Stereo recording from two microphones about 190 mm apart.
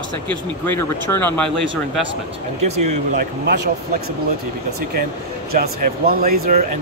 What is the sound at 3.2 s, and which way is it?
Speech, 60° right (ahead or behind).